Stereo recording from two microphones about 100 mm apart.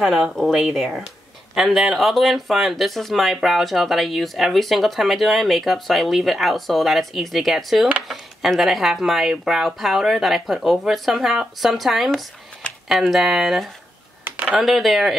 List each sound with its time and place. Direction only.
0.0 s speech: centre (ahead or behind)
14.2 s a sound: 15° right (ahead or behind)
14.6 s speech: centre (ahead or behind)